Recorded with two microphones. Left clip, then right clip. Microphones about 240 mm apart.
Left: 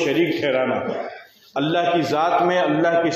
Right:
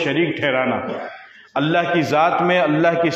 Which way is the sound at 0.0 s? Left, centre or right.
Right.